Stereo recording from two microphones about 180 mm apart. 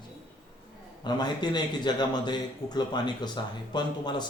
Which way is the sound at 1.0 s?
25° left (ahead or behind).